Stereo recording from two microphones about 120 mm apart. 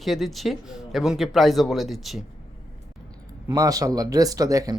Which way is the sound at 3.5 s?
30° right (ahead or behind).